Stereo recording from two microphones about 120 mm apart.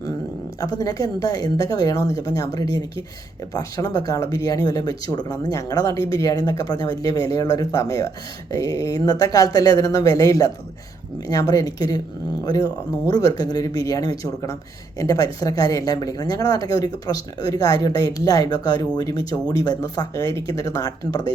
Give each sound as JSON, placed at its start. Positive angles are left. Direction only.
{"t": 0.6, "sound": "speech", "side_deg": 30}
{"t": 13.1, "sound": "speech", "side_deg": 35}